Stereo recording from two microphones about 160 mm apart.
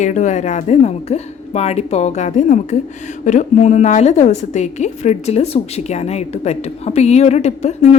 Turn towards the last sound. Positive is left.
turn(degrees=45)  # may be behind; listen again after turning